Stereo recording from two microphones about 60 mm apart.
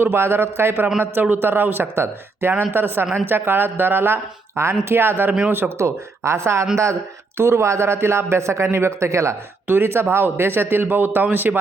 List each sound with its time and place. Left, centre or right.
0.0 s a man's voice: right
5.7 s a man's voice: right
9.6 s speech: right